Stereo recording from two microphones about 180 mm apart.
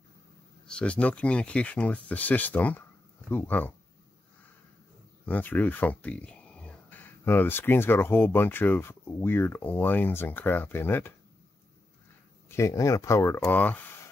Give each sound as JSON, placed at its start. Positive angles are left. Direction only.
{"t": 0.7, "sound": "speech", "side_deg": 5}
{"t": 5.2, "sound": "speech", "side_deg": 10}
{"t": 12.4, "sound": "speech", "side_deg": 15}